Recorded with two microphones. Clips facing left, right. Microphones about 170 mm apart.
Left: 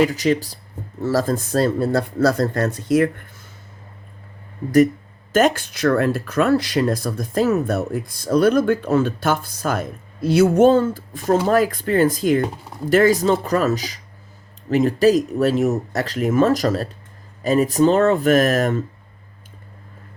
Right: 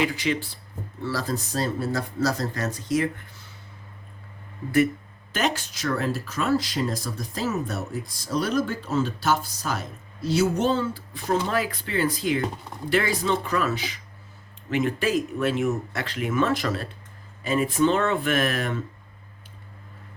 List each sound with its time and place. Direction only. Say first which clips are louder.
0.0 s speech: left 7 dB; 40° left (ahead or behind); by 3.2 s 55° left (ahead or behind)
5.3 s speech: left 9 dB; 50° left (ahead or behind)